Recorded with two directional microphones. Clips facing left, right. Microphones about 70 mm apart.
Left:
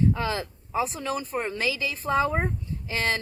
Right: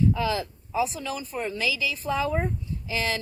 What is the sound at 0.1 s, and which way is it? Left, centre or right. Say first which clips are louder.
Speech: right 2 dB; left.